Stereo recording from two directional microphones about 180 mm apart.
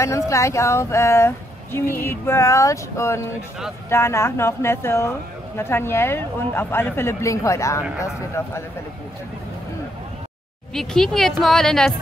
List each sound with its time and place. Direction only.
0.0 s speech: 15° left (ahead or behind)
10.7 s speech: centre (ahead or behind)